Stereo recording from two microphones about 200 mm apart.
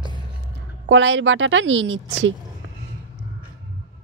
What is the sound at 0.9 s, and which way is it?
Speech, 65° right (ahead or behind).